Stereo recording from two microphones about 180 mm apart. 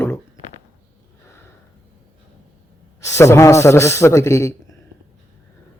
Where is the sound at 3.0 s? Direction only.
15° left (ahead or behind).